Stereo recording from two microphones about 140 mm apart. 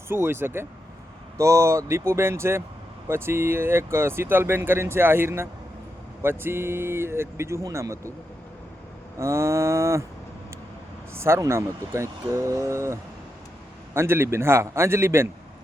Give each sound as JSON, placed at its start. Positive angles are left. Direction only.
{"t": 0.1, "sound": "speech", "side_deg": -15}
{"t": 9.1, "sound": "speech", "side_deg": -20}
{"t": 11.1, "sound": "speech", "side_deg": -20}